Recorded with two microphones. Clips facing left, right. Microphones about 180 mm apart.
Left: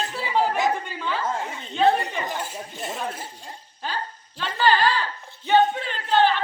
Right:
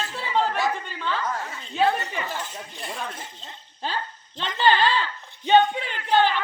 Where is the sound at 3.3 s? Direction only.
25° right (ahead or behind).